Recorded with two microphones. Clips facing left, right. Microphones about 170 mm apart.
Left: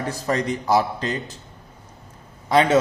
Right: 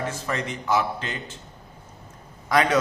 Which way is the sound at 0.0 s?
35° left (ahead or behind).